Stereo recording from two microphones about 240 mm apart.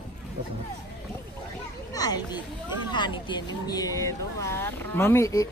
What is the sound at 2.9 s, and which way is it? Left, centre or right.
Speech, centre.